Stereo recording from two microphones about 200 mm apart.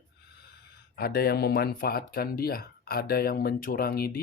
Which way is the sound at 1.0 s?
50° left (ahead or behind).